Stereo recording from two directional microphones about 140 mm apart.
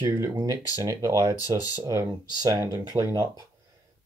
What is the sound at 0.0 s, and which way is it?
Speech, 25° right (ahead or behind).